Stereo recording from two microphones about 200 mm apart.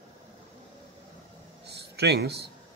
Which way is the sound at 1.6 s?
55° right (ahead or behind).